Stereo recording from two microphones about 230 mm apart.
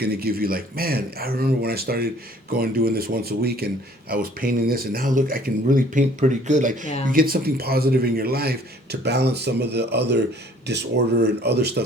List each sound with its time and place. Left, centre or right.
0.0 s a man's voice: right